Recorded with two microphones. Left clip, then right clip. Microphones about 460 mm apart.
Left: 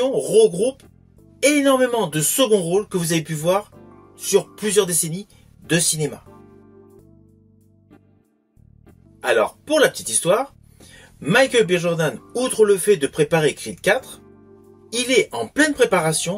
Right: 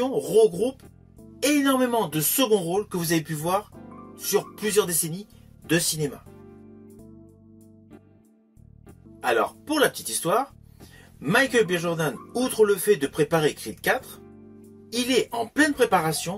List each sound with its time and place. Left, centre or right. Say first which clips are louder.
0.1 s speech: left 4 dB; right
9.2 s speech: left 5 dB; right